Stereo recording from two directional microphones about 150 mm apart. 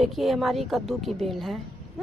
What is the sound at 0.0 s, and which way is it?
A woman's voice, centre (ahead or behind).